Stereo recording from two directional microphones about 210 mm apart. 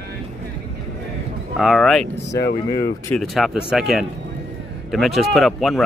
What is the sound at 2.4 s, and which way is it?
Speech, 45° left (ahead or behind).